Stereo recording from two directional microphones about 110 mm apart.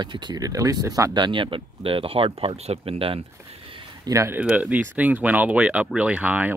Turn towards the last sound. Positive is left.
turn(degrees=-15)  # may be behind; listen again after turning